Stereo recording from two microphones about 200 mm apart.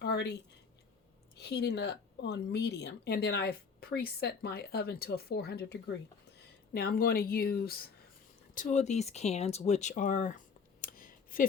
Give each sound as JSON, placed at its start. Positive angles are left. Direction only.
{"t": 0.0, "sound": "a sound", "side_deg": 60}
{"t": 1.4, "sound": "speech", "side_deg": 55}
{"t": 8.5, "sound": "speech", "side_deg": 35}